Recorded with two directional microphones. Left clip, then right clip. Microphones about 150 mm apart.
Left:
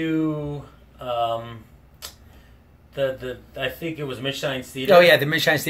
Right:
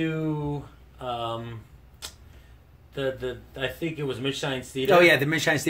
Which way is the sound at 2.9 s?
50° right (ahead or behind).